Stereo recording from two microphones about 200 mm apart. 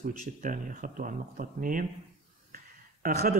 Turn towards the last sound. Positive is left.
turn(degrees=-45)  # may be behind; listen again after turning